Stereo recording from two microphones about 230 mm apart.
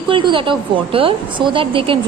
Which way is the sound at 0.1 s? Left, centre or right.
Right.